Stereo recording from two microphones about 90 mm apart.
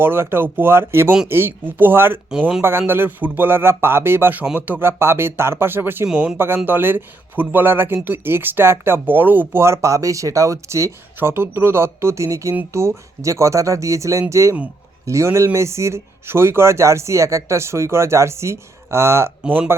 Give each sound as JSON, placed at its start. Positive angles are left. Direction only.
{"t": 0.0, "sound": "speech", "side_deg": -25}